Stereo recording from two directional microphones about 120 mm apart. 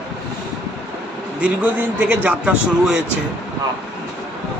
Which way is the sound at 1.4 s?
10° right (ahead or behind).